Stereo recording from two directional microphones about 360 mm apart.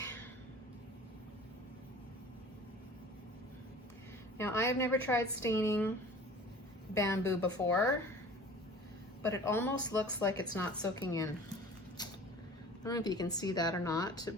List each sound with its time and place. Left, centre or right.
4.4 s speech: centre
6.9 s speech: centre
9.3 s speech: centre
12.0 s vehicle: centre
12.8 s speech: centre